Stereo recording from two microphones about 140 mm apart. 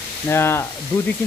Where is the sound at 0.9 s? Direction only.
35° left (ahead or behind).